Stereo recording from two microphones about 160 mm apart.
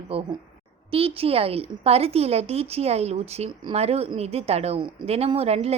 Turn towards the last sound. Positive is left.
turn(degrees=-40)  # may be behind; listen again after turning